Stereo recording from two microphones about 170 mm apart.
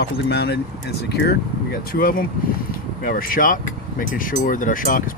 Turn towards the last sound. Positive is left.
turn(degrees=50)  # may be behind; listen again after turning